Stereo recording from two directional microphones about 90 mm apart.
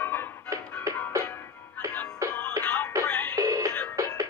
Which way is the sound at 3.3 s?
40° right (ahead or behind).